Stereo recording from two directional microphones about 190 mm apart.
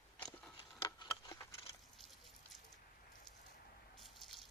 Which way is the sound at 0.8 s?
20° left (ahead or behind).